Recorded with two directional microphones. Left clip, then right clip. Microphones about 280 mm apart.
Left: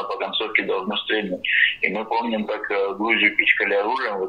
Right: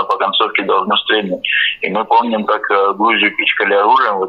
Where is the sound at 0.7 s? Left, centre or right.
Centre.